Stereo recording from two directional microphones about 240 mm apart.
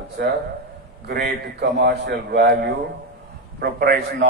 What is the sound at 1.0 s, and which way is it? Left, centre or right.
A man's voice, right.